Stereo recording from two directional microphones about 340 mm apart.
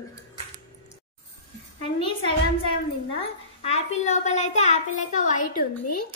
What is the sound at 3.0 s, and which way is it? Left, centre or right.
A child's voice, centre.